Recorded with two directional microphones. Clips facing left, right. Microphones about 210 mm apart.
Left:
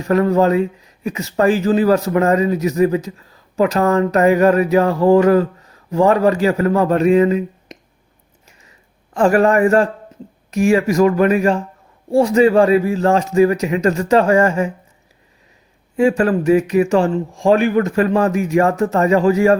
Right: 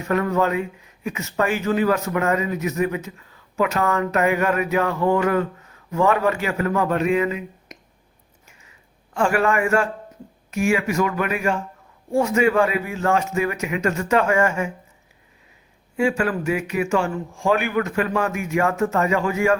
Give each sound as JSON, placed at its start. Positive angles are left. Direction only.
{"t": 0.0, "sound": "speech", "side_deg": 35}
{"t": 8.4, "sound": "a sound", "side_deg": 35}
{"t": 9.1, "sound": "speech", "side_deg": 35}
{"t": 16.0, "sound": "speech", "side_deg": 35}